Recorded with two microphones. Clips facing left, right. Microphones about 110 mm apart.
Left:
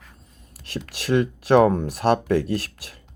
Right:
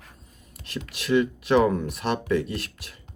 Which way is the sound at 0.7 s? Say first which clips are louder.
Left 2 dB; 35° left (ahead or behind).